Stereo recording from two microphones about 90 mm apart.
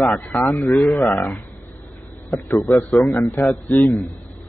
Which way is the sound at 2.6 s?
35° left (ahead or behind).